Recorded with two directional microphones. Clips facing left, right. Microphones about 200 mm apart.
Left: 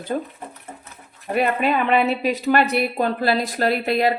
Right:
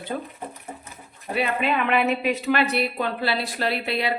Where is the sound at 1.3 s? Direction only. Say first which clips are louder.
Left 4 dB; 45° left (ahead or behind).